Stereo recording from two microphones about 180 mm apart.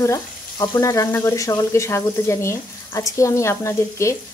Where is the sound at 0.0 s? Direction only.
15° left (ahead or behind).